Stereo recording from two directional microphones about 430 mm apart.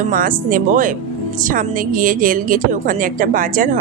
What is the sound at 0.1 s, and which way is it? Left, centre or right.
A woman's voice, centre.